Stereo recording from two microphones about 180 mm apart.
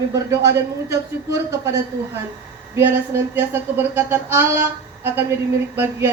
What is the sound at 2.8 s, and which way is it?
Speech, 10° right (ahead or behind).